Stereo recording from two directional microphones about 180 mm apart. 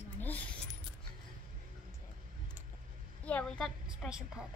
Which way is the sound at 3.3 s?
5° left (ahead or behind).